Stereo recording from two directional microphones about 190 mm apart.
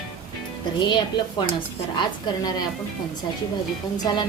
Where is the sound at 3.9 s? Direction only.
20° left (ahead or behind).